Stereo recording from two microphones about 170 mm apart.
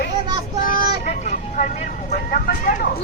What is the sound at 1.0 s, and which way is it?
Speech, 45° left (ahead or behind).